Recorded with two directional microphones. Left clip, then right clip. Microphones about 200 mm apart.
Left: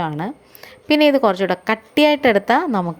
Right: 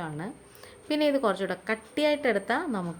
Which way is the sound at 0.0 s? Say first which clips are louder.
Left 13 dB; 35° left (ahead or behind).